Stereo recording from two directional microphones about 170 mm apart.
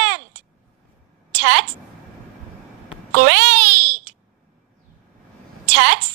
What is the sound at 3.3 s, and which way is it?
Babbling, 90° right.